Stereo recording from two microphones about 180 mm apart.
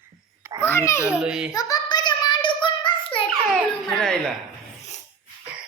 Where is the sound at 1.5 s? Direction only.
20° left (ahead or behind).